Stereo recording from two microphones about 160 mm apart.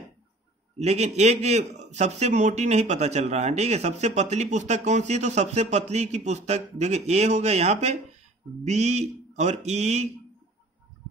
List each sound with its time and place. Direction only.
0.7 s speech: 45° right (ahead or behind)